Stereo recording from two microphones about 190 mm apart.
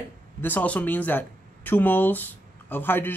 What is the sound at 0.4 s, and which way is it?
Speech, 10° left (ahead or behind).